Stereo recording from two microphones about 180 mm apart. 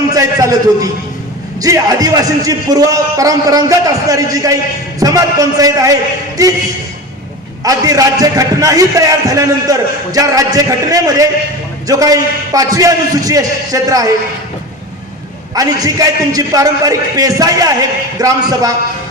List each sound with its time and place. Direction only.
0.1 s a sound: 20° right (ahead or behind)
1.6 s a man's voice: 20° right (ahead or behind)
7.6 s a man's voice: 20° right (ahead or behind)
15.5 s a man's voice: 20° right (ahead or behind)